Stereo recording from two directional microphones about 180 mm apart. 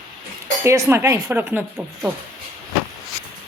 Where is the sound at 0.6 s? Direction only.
15° right (ahead or behind).